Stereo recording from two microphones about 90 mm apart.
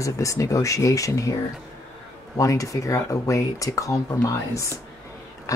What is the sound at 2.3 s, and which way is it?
Speech, 40° left (ahead or behind).